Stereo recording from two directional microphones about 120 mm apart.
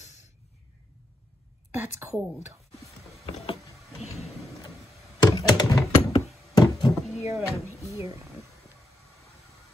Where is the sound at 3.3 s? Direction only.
60° left (ahead or behind).